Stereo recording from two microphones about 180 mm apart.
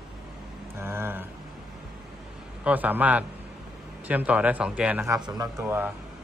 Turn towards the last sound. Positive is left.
turn(degrees=-10)  # may be behind; listen again after turning